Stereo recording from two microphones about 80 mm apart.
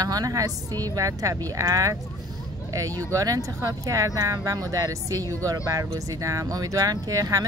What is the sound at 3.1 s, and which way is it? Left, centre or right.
Speech, right.